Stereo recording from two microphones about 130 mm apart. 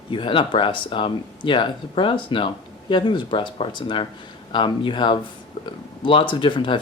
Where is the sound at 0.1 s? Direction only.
40° left (ahead or behind).